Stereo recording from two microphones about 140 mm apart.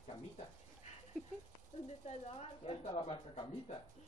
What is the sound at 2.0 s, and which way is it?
Speech, 45° left (ahead or behind).